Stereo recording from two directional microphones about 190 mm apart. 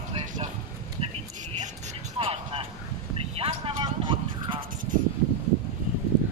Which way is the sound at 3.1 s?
30° right (ahead or behind).